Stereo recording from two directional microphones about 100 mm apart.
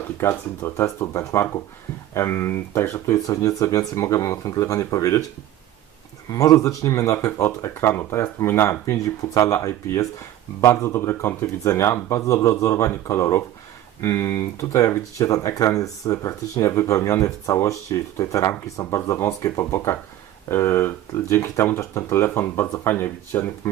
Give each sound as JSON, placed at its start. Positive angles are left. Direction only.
{"t": 0.2, "sound": "speech", "side_deg": 25}
{"t": 6.3, "sound": "speech", "side_deg": 35}